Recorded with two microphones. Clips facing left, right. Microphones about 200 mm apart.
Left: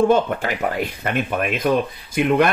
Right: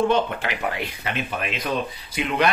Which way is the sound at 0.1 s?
45° left (ahead or behind).